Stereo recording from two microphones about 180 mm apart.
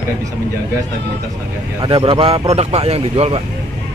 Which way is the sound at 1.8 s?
30° right (ahead or behind).